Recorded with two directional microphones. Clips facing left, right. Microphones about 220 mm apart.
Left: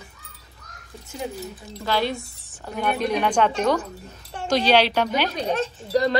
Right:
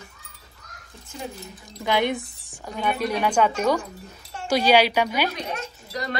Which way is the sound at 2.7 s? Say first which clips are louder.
Left 1 dB; 5° left (ahead or behind).